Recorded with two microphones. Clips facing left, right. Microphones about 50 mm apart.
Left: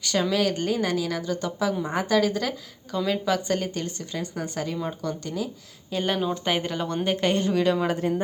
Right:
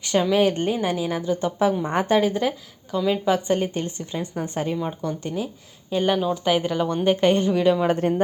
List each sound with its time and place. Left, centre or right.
0.0 s speech: right
4.8 s speech: centre
5.2 s speech: right
5.9 s speech: centre
7.9 s speech: right